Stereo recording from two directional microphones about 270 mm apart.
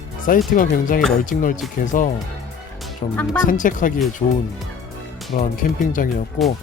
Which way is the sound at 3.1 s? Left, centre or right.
Centre.